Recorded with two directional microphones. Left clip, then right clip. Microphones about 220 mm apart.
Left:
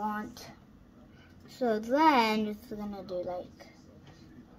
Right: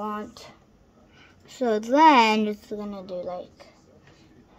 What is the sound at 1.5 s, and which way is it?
A child's voice, 35° right (ahead or behind).